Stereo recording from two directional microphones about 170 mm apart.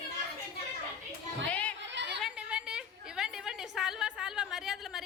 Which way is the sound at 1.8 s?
90° right.